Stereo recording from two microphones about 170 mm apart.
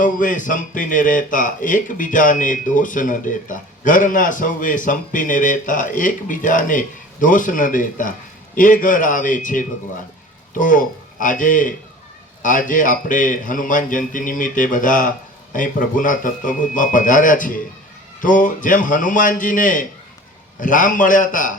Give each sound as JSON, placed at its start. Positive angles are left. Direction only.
{"t": 0.0, "sound": "speech", "side_deg": 50}